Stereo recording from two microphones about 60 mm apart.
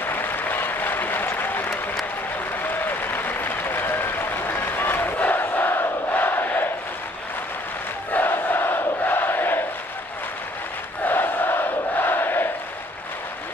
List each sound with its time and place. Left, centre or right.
0.0 s applause: left
8.1 s crowd: left
11.1 s crowd: left